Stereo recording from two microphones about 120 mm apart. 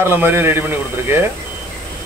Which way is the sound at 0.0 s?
20° right (ahead or behind).